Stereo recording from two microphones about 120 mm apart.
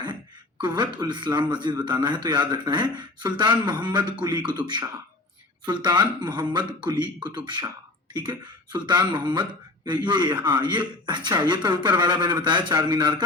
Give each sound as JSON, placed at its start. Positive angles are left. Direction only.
{"t": 0.6, "sound": "a man's voice", "side_deg": -35}